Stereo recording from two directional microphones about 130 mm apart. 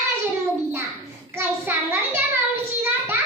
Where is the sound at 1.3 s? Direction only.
20° right (ahead or behind).